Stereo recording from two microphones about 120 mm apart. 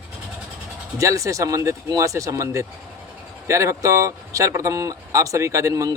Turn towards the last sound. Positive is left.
turn(degrees=-25)  # may be behind; listen again after turning